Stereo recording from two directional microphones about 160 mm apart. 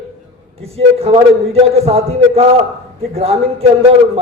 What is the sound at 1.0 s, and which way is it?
A man's voice, 40° right (ahead or behind).